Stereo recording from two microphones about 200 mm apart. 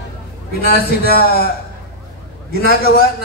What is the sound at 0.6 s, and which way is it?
Speech, 50° left (ahead or behind).